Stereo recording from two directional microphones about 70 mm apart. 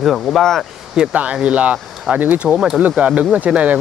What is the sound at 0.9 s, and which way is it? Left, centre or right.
Speech, centre.